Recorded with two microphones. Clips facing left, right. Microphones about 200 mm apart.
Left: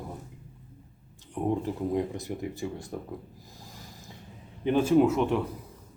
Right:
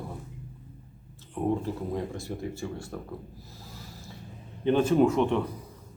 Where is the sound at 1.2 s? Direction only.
15° left (ahead or behind).